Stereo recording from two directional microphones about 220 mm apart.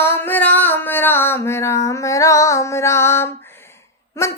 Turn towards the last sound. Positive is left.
turn(degrees=10)  # may be behind; listen again after turning